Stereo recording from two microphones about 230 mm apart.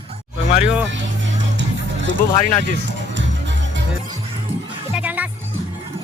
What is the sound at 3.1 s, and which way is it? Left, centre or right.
Music, right.